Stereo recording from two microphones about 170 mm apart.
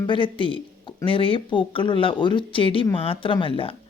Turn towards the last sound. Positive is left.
turn(degrees=35)  # may be behind; listen again after turning